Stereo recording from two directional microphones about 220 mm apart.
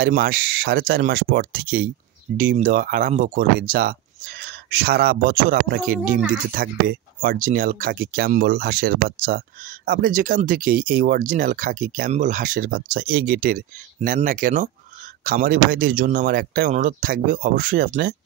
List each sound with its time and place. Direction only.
0.0 s a man's voice: 45° right (ahead or behind)
6.0 s speech: 5° right (ahead or behind)
6.5 s speech: 40° right (ahead or behind)